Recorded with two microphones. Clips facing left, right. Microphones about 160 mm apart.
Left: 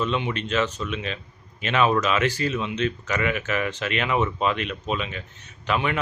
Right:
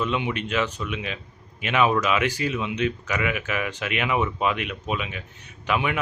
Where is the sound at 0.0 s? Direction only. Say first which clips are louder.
Even; 15° right (ahead or behind).